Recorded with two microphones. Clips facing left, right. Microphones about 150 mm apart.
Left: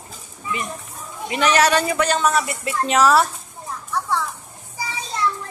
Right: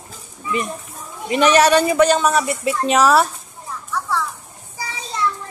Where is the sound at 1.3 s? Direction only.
20° right (ahead or behind).